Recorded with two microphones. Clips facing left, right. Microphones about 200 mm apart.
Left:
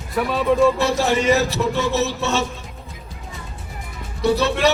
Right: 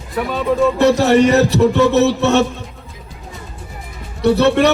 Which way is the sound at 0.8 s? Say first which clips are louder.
Right 8 dB; 65° right (ahead or behind).